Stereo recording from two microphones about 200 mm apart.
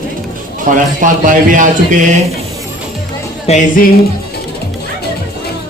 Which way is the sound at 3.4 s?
40° left (ahead or behind).